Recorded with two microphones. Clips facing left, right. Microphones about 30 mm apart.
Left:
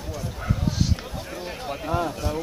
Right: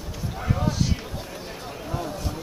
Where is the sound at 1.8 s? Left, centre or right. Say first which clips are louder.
Left 6 dB; left.